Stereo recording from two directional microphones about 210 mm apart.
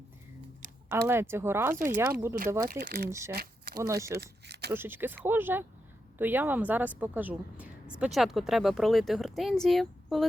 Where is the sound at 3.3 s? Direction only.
50° right (ahead or behind).